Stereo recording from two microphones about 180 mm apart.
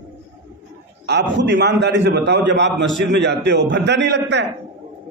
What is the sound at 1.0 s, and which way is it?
A man's voice, 70° right (ahead or behind).